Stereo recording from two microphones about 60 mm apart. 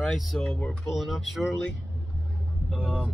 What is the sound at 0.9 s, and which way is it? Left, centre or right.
Speech, centre.